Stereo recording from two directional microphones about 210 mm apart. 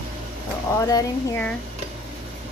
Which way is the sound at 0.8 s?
15° left (ahead or behind).